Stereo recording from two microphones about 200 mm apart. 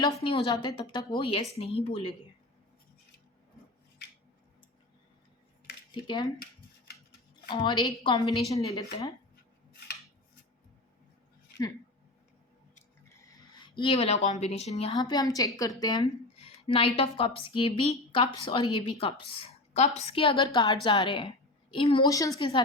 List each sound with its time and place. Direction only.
0.2 s a woman's voice: 25° left (ahead or behind)
5.9 s a woman's voice: 20° left (ahead or behind)
7.5 s a woman's voice: 20° left (ahead or behind)
13.6 s a woman's voice: 25° left (ahead or behind)
14.9 s a woman's voice: 20° left (ahead or behind)
22.1 s a woman's voice: 15° left (ahead or behind)
22.4 s a woman's voice: 25° left (ahead or behind)